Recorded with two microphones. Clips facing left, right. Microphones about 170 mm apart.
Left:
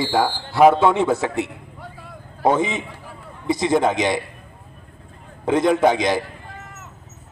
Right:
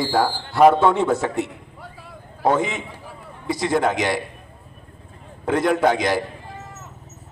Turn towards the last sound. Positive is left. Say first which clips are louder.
# left 2 dB
turn(degrees=15)  # may be behind; listen again after turning